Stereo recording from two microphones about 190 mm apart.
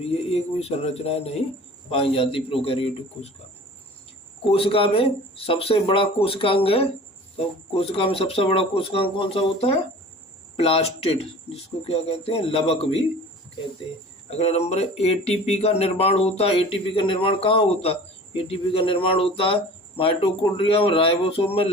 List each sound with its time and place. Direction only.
0.0 s speech: 30° left (ahead or behind)
4.4 s speech: 30° left (ahead or behind)
14.3 s speech: 35° left (ahead or behind)